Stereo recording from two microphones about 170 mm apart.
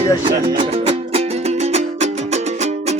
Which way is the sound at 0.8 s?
35° right (ahead or behind).